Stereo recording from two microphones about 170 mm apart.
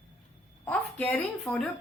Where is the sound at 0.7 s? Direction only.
10° left (ahead or behind).